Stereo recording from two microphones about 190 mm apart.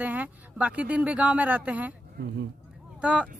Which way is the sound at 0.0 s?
10° right (ahead or behind).